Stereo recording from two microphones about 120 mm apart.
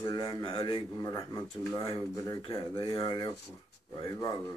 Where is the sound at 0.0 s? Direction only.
35° left (ahead or behind).